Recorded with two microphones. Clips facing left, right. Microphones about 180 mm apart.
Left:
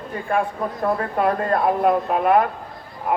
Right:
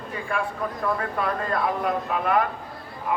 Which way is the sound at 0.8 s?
50° left (ahead or behind).